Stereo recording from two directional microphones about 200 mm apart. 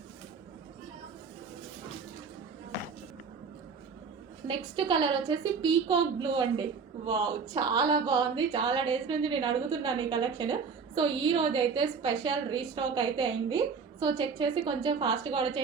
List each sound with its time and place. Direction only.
4.4 s a woman's voice: 25° right (ahead or behind)